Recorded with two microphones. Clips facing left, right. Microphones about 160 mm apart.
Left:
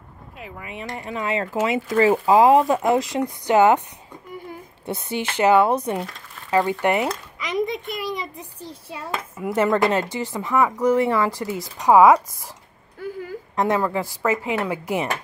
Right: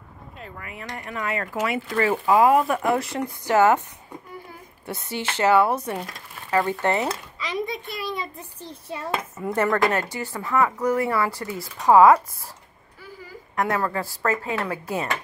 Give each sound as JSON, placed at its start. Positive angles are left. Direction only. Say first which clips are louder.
{"t": 0.4, "sound": "speech", "louder": "left 3 dB", "side_deg": 10}
{"t": 0.7, "sound": "speech", "louder": "left 5 dB", "side_deg": 20}
{"t": 4.8, "sound": "speech", "louder": "left 3 dB", "side_deg": 20}
{"t": 7.3, "sound": "a sound", "louder": "left 4 dB", "side_deg": 20}
{"t": 8.9, "sound": "speech", "louder": "right 2 dB", "side_deg": 5}
{"t": 13.6, "sound": "speech", "louder": "left 3 dB", "side_deg": 25}